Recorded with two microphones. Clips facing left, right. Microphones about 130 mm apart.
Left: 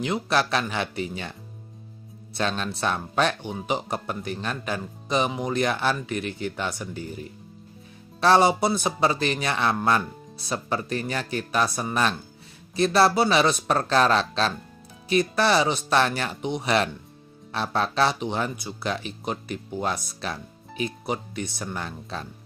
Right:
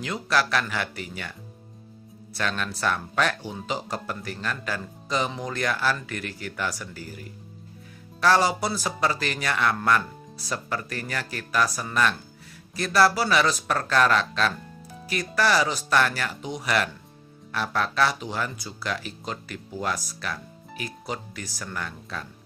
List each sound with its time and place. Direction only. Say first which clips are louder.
0.0 s speech: left 2 dB; 25° left (ahead or behind)
2.3 s speech: left 2 dB; 25° left (ahead or behind)